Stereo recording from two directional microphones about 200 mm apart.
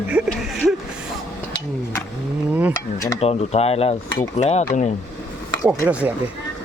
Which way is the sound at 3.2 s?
30° left (ahead or behind).